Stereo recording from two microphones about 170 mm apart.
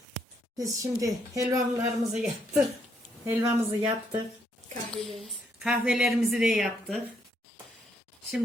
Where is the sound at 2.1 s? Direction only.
5° right (ahead or behind).